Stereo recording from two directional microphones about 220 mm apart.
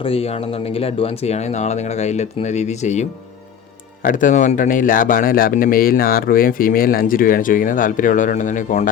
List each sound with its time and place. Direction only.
0.0 s speech: 25° left (ahead or behind)